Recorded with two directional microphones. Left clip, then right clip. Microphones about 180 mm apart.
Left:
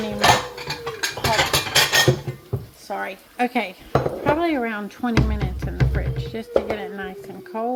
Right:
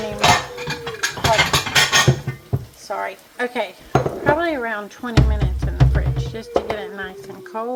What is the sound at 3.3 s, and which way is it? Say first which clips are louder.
Speech: left 2 dB; 35° left (ahead or behind).